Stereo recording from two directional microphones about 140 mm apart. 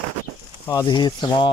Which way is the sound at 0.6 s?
25° left (ahead or behind).